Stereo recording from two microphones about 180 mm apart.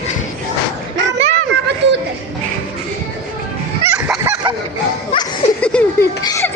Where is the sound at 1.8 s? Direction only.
75° right (ahead or behind).